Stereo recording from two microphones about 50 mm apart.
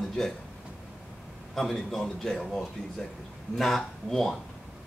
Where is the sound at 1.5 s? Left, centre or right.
Centre.